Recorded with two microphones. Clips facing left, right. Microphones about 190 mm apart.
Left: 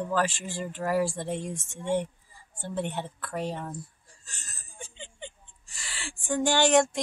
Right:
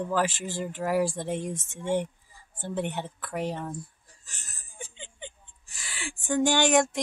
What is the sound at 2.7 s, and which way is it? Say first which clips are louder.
Speech: right 1 dB; 15° right (ahead or behind).